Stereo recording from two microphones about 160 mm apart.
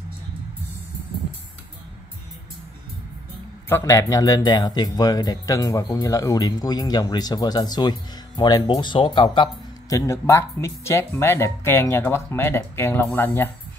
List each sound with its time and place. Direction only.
3.6 s speech: 15° left (ahead or behind)